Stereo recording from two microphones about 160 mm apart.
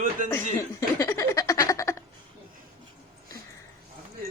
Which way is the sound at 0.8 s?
20° left (ahead or behind).